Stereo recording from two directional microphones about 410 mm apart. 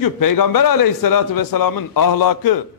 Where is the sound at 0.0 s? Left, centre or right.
Left.